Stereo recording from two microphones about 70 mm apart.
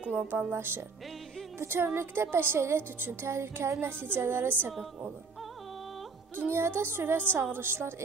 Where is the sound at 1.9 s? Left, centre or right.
Right.